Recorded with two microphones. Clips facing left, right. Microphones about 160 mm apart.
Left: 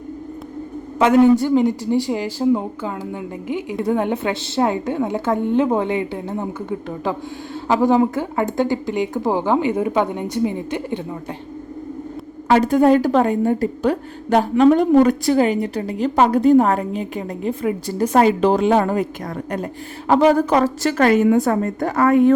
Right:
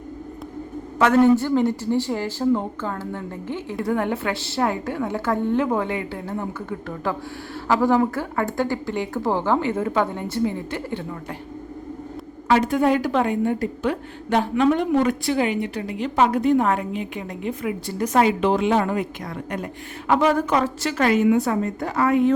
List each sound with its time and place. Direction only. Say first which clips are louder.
0.9 s speech: left 3 dB; 15° left (ahead or behind)
12.5 s a woman's voice: left 5 dB; 40° left (ahead or behind)
20.1 s a woman's voice: left 5 dB; 35° left (ahead or behind)